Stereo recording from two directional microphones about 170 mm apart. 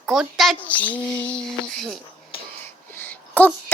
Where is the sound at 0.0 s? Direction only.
Centre (ahead or behind).